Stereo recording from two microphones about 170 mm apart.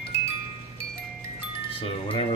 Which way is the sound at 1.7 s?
35° left (ahead or behind).